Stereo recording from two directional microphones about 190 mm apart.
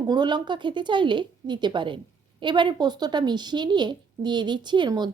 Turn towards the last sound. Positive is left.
turn(degrees=-20)  # may be behind; listen again after turning